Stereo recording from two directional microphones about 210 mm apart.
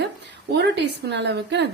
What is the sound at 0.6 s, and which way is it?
A woman's voice, 55° right (ahead or behind).